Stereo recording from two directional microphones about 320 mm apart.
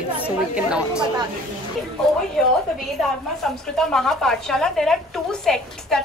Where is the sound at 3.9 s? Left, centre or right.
Centre.